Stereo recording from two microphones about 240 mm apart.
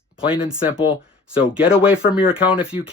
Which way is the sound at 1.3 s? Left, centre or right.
Centre.